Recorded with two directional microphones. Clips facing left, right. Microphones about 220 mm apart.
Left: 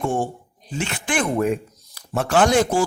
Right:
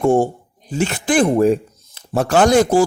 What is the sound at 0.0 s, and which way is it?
Speech, 40° right (ahead or behind).